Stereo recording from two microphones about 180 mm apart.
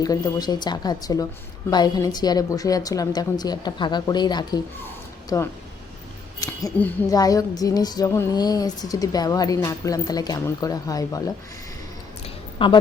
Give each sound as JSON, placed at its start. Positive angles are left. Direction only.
{"t": 0.0, "sound": "speech", "side_deg": 20}
{"t": 6.4, "sound": "a sound", "side_deg": 20}
{"t": 7.1, "sound": "speech", "side_deg": 20}
{"t": 12.6, "sound": "speech", "side_deg": 30}